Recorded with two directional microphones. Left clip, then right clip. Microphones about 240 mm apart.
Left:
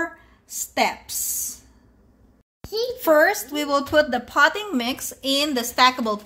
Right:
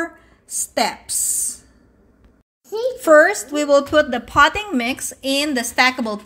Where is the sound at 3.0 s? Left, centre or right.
Centre.